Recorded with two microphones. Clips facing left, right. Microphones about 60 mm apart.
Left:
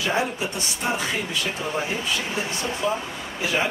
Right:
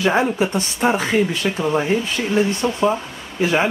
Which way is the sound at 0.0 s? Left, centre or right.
Right.